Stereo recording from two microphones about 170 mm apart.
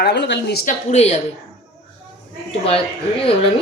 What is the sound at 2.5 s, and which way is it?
Speech, 35° left (ahead or behind).